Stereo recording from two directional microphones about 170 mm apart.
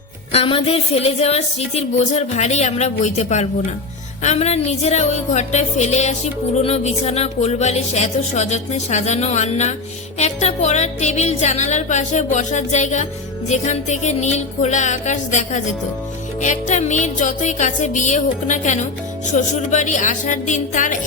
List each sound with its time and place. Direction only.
0.3 s a woman's voice: 35° left (ahead or behind)